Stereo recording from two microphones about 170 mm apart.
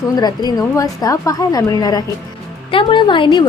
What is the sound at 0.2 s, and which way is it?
A woman's voice, 25° left (ahead or behind).